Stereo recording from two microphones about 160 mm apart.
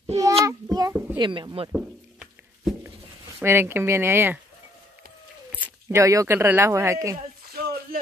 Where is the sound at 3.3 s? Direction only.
15° right (ahead or behind).